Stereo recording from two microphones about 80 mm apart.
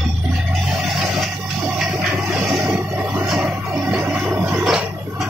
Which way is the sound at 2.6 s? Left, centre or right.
Right.